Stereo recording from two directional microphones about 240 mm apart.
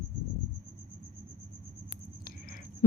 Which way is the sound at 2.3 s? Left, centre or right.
Left.